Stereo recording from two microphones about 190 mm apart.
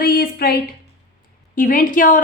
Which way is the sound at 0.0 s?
55° left (ahead or behind).